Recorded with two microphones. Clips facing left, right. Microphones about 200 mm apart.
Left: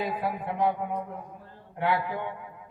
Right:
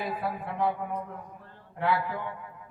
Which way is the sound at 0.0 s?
20° left (ahead or behind).